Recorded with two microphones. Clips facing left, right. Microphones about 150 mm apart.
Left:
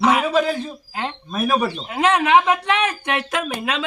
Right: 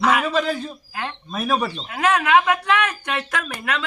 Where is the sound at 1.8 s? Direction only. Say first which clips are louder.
Left 2 dB; 25° left (ahead or behind).